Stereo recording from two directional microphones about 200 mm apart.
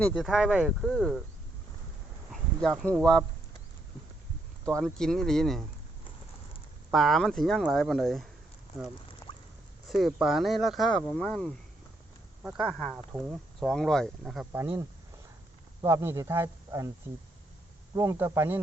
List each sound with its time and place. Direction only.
0.0 s speech: centre (ahead or behind)
2.3 s a sound: centre (ahead or behind)
3.0 s speech: 5° left (ahead or behind)
4.8 s speech: centre (ahead or behind)
6.9 s speech: centre (ahead or behind)
9.3 s rodents: 25° left (ahead or behind)
9.9 s speech: centre (ahead or behind)
15.8 s speech: 15° right (ahead or behind)
17.9 s speech: 15° right (ahead or behind)